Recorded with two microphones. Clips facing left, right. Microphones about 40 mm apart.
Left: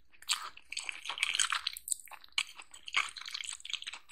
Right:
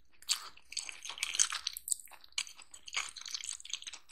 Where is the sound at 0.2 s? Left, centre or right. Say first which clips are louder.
Left 3 dB; left.